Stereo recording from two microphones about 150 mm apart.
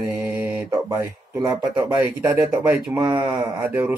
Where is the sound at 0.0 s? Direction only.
15° right (ahead or behind).